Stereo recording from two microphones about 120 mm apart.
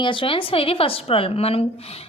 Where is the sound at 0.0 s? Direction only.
45° left (ahead or behind).